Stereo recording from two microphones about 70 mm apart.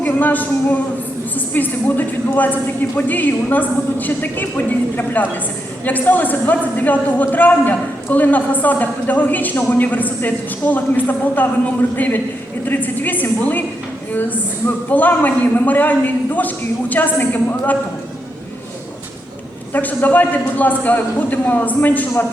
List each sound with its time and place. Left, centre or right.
0.0 s a man's voice: left
19.7 s a man's voice: left